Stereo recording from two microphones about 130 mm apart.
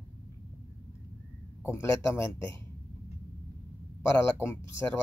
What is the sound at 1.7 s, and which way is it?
Speech, 20° left (ahead or behind).